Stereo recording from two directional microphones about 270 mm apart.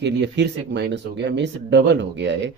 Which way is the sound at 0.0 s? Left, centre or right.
Right.